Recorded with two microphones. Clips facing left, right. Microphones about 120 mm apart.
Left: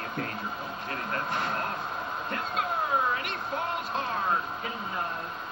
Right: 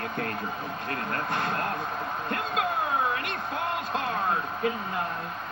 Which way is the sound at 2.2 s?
60° right (ahead or behind).